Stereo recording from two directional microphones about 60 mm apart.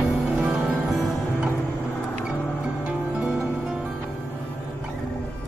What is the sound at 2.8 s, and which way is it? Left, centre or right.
Music, centre.